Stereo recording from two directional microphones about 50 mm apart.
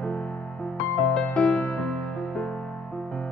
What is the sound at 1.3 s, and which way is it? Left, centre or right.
Music, centre.